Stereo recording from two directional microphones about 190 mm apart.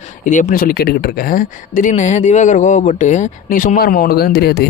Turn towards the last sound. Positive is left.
turn(degrees=60)  # may be behind; listen again after turning